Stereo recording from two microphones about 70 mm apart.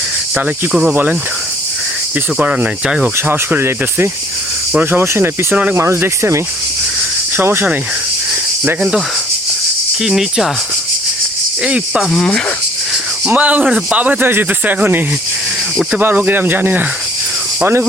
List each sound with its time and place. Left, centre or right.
2.4 s speech: right
10.0 s speech: centre
11.6 s speech: centre
12.1 s speech: centre
13.2 s speech: right